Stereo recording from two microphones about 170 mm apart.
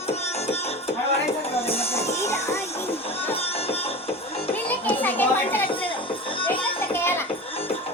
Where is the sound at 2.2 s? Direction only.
15° left (ahead or behind).